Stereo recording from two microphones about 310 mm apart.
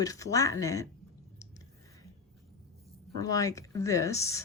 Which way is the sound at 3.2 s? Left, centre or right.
Centre.